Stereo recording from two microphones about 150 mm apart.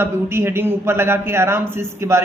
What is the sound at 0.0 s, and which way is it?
A man's voice, 15° right (ahead or behind).